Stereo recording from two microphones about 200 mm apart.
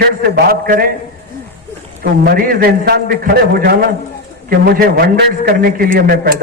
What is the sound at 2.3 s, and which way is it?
A man's voice, 50° right (ahead or behind).